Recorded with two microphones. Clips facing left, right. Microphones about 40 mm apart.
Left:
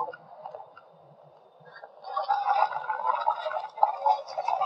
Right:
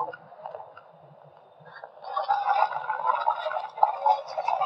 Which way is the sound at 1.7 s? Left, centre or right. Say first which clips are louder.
Right 1 dB; right.